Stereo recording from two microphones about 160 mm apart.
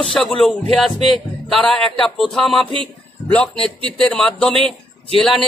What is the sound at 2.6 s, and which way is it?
Speech, 30° right (ahead or behind).